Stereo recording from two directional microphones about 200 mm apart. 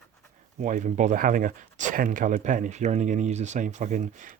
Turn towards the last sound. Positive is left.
turn(degrees=-40)  # may be behind; listen again after turning